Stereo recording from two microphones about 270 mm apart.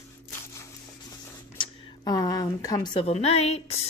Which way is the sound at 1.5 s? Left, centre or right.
Centre.